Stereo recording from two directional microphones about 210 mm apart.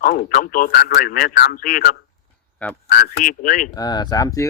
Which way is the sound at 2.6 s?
5° left (ahead or behind).